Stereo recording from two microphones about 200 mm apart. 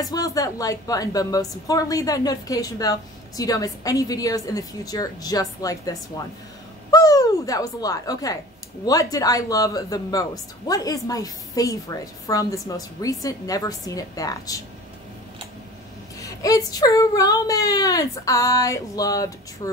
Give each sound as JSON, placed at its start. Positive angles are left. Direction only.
{"t": 0.0, "sound": "a woman's voice", "side_deg": 20}
{"t": 16.2, "sound": "a woman's voice", "side_deg": 15}